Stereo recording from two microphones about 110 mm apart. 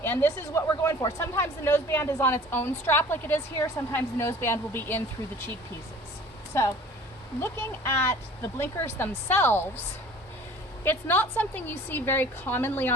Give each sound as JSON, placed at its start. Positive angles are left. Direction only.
{"t": 0.0, "sound": "speech", "side_deg": 20}
{"t": 6.5, "sound": "speech", "side_deg": 25}
{"t": 10.8, "sound": "speech", "side_deg": 20}